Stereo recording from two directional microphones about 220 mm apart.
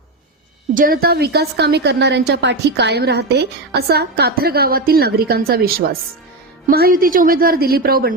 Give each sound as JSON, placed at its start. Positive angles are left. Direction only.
{"t": 0.7, "sound": "a woman's voice", "side_deg": -40}